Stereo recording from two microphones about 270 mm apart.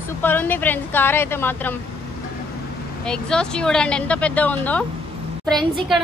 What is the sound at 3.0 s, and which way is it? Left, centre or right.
Speech, centre.